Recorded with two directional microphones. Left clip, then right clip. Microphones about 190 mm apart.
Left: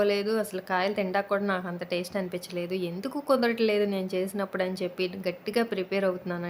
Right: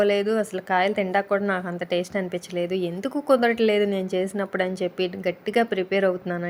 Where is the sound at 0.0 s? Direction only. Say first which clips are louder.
Right 5 dB; 15° right (ahead or behind).